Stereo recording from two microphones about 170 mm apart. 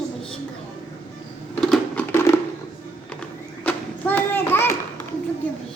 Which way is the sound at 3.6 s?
10° left (ahead or behind).